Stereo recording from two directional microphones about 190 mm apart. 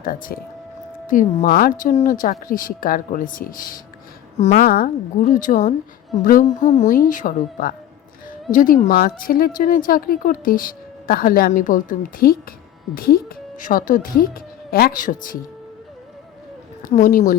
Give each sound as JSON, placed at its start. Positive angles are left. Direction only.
{"t": 0.0, "sound": "speech", "side_deg": 50}
{"t": 4.5, "sound": "speech", "side_deg": 50}
{"t": 16.8, "sound": "speech", "side_deg": 45}